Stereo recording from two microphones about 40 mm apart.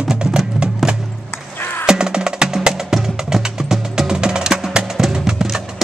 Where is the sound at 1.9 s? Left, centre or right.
Centre.